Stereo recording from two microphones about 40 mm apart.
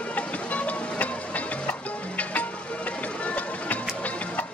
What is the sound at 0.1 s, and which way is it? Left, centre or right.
Music, left.